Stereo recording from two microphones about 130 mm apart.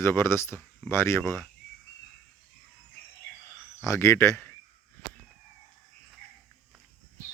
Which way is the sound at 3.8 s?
20° left (ahead or behind).